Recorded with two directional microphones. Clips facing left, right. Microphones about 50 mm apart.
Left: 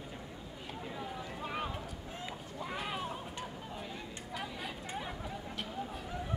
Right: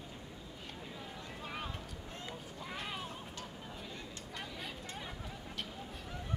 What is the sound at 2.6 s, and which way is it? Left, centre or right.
Run, centre.